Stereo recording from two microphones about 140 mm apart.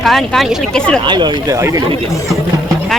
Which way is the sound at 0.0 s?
Centre (ahead or behind).